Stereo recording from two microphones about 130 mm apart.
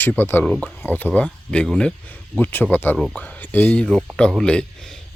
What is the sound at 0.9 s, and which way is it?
Speech, 15° left (ahead or behind).